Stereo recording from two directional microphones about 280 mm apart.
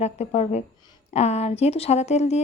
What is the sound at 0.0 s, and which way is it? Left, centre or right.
Speech, left.